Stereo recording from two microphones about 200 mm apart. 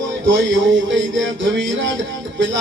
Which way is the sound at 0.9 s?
70° right (ahead or behind).